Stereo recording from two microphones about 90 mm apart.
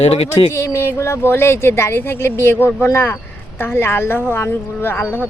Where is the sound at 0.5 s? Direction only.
30° left (ahead or behind).